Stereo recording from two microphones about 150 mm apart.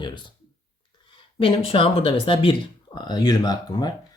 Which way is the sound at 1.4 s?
35° left (ahead or behind).